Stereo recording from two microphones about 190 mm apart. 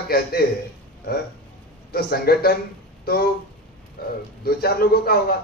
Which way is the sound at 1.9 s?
55° left (ahead or behind).